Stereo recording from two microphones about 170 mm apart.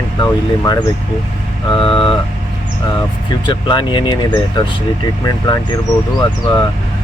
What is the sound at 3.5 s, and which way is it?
Speech, 30° left (ahead or behind).